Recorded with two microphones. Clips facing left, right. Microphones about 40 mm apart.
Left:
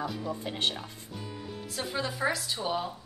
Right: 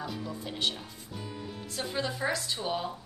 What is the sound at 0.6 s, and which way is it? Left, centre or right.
Speech, left.